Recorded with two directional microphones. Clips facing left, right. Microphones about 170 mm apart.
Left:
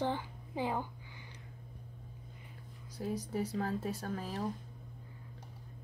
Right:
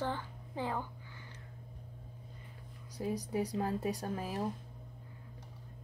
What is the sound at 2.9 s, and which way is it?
Speech, 10° right (ahead or behind).